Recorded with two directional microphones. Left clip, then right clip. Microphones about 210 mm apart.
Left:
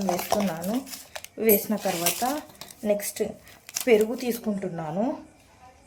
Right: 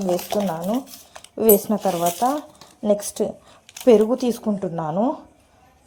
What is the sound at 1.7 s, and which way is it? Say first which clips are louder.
Speech: right 6 dB; 15° right (ahead or behind).